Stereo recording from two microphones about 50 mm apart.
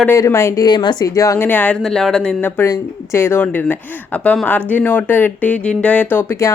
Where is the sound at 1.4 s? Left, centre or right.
Left.